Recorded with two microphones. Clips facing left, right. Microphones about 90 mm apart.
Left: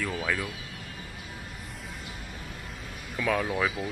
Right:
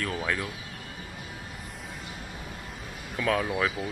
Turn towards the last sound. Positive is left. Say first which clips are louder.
# even
turn(degrees=-5)  # may be behind; listen again after turning